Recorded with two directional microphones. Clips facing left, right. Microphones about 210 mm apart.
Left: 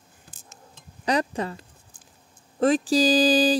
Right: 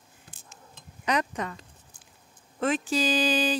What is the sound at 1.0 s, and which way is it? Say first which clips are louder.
Speech: left 4 dB; 30° left (ahead or behind).